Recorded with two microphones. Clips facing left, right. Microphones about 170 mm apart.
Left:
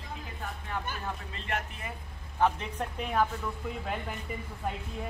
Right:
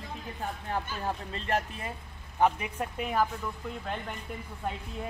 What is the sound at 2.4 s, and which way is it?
Speech, 10° right (ahead or behind).